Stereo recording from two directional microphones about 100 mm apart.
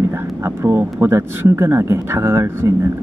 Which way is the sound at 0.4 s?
25° right (ahead or behind).